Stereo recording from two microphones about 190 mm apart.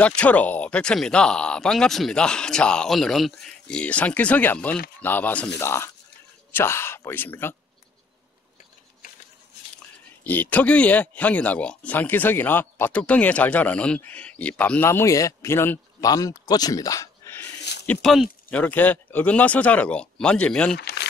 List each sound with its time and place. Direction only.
0.0 s speech: 5° left (ahead or behind)
10.2 s speech: 10° left (ahead or behind)
17.8 s speech: centre (ahead or behind)
20.7 s a sound: 60° left (ahead or behind)